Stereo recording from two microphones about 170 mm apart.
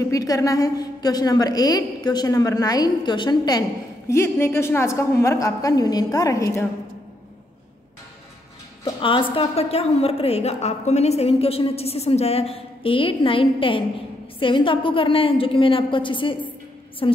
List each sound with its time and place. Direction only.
0.1 s a woman's voice: 20° left (ahead or behind)
8.8 s music: 30° left (ahead or behind)
9.3 s a woman's voice: 35° left (ahead or behind)